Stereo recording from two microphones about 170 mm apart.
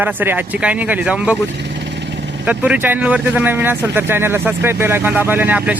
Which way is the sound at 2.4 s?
10° right (ahead or behind).